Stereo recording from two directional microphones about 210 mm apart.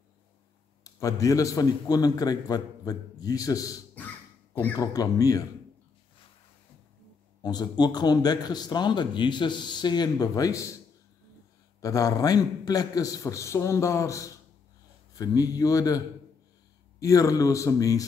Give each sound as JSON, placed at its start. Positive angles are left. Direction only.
{"t": 0.8, "sound": "a man's voice", "side_deg": 15}
{"t": 7.4, "sound": "a man's voice", "side_deg": 20}
{"t": 11.8, "sound": "a man's voice", "side_deg": 15}
{"t": 17.0, "sound": "a man's voice", "side_deg": 15}